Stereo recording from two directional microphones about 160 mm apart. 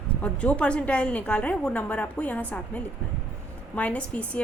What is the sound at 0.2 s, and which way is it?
A woman's voice, 5° left (ahead or behind).